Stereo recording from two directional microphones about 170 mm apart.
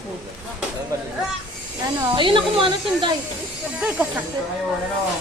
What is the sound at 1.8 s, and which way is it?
Speech, 30° right (ahead or behind).